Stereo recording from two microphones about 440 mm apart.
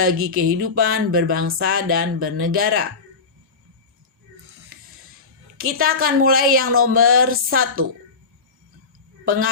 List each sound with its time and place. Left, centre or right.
0.0 s a woman's voice: right
5.5 s a woman's voice: right
9.2 s a woman's voice: right